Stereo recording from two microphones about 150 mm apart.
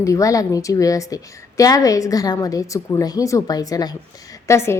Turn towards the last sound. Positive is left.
turn(degrees=15)  # may be behind; listen again after turning